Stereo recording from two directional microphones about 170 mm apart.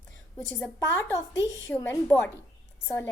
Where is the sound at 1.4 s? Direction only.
15° left (ahead or behind).